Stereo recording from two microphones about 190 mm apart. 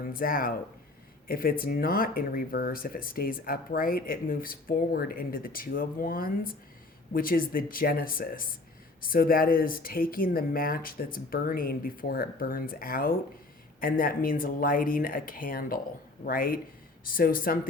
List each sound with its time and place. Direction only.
0.0 s speech: 50° left (ahead or behind)